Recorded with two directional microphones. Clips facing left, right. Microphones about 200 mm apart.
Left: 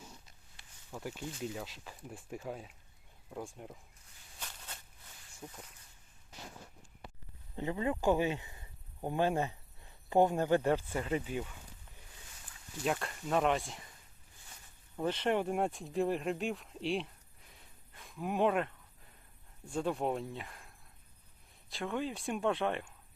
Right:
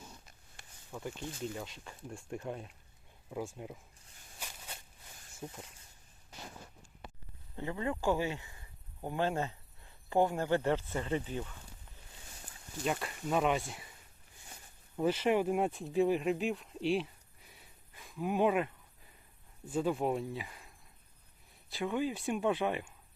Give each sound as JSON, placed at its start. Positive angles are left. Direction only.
{"t": 0.6, "sound": "a sound", "side_deg": -50}
{"t": 0.9, "sound": "speech", "side_deg": 5}
{"t": 4.4, "sound": "a sound", "side_deg": -10}
{"t": 5.4, "sound": "speech", "side_deg": -20}
{"t": 7.5, "sound": "speech", "side_deg": 20}
{"t": 12.8, "sound": "speech", "side_deg": 0}
{"t": 14.9, "sound": "speech", "side_deg": -5}
{"t": 21.7, "sound": "speech", "side_deg": -5}